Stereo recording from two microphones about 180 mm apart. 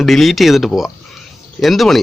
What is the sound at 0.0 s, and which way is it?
Speech, centre (ahead or behind).